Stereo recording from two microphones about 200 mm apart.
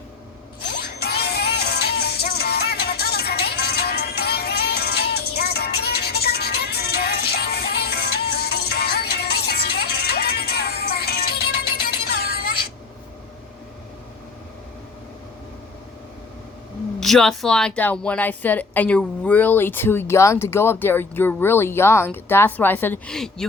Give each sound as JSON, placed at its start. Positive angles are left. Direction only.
{"t": 0.7, "sound": "music", "side_deg": 50}
{"t": 17.0, "sound": "a woman's voice", "side_deg": 5}